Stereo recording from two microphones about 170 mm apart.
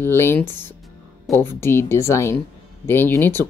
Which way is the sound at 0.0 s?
15° left (ahead or behind).